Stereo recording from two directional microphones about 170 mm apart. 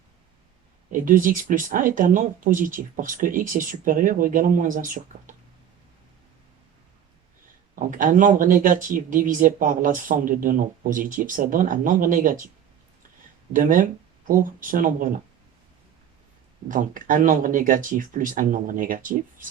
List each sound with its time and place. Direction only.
0.9 s speech: 50° right (ahead or behind)
7.8 s speech: 50° right (ahead or behind)
13.5 s speech: 50° right (ahead or behind)
16.6 s speech: 50° right (ahead or behind)